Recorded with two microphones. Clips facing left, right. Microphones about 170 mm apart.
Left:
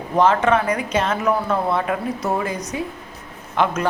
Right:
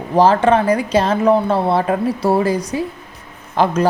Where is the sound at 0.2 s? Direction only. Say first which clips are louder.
Right 4 dB; 30° right (ahead or behind).